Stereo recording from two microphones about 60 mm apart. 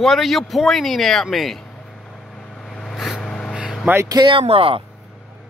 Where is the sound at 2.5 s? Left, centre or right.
Centre.